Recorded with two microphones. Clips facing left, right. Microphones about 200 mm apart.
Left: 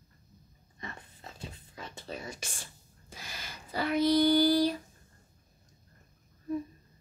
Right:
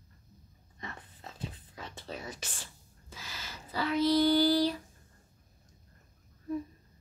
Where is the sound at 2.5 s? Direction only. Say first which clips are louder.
Even; 50° left (ahead or behind).